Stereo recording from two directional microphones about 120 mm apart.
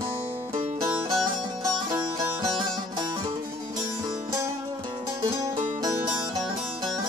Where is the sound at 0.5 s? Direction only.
30° right (ahead or behind).